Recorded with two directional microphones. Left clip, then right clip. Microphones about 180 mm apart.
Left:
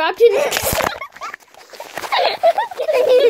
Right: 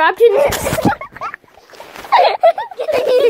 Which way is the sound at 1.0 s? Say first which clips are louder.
Right 3 dB; 20° left (ahead or behind).